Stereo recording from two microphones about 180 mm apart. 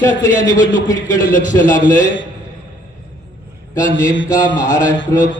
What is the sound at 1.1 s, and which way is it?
Speech, 45° left (ahead or behind).